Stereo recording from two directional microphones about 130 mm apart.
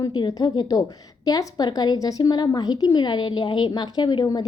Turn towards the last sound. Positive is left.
turn(degrees=30)  # may be behind; listen again after turning